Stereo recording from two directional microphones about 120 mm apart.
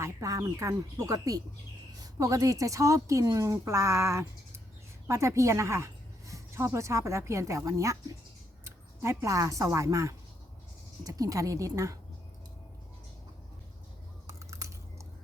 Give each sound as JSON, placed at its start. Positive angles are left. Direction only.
{"t": 0.0, "sound": "a woman's voice", "side_deg": -25}
{"t": 14.3, "sound": "chewing", "side_deg": -25}